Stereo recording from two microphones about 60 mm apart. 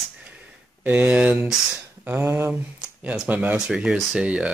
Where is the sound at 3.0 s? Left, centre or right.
Right.